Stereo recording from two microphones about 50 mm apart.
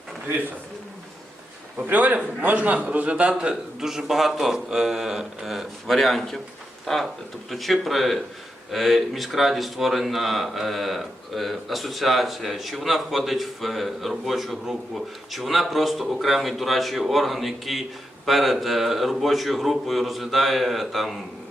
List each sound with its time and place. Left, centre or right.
1.9 s a man's voice: right
3.8 s a man's voice: centre